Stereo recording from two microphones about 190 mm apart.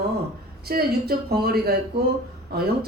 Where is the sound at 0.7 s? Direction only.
55° right (ahead or behind).